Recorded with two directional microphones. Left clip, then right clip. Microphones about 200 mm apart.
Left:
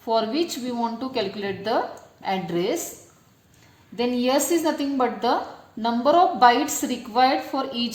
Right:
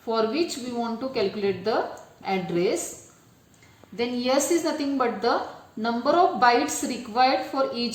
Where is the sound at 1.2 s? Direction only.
30° left (ahead or behind).